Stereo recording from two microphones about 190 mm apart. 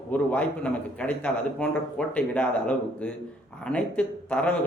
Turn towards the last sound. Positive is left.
turn(degrees=5)  # may be behind; listen again after turning